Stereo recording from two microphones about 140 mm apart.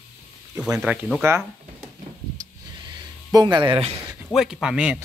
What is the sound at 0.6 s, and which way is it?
Speech, 5° right (ahead or behind).